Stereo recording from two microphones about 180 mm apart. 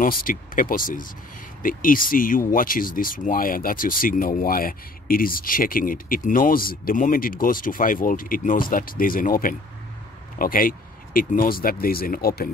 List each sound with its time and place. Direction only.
0.0 s speech: 50° left (ahead or behind)